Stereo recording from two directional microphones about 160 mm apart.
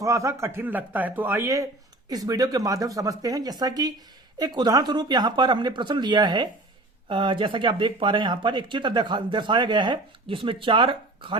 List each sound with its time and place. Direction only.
0.0 s speech: 20° right (ahead or behind)